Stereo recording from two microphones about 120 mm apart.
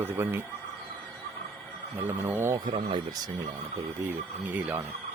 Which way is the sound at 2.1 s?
20° right (ahead or behind).